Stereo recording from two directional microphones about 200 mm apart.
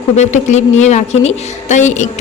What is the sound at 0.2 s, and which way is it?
Speech, 35° left (ahead or behind).